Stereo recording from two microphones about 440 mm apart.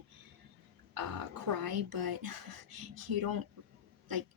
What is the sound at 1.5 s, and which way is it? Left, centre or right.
A woman's voice, right.